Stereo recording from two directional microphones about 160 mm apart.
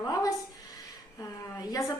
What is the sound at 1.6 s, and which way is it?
Speech, 20° left (ahead or behind).